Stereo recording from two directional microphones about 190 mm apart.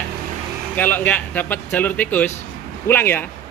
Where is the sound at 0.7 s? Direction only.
10° left (ahead or behind).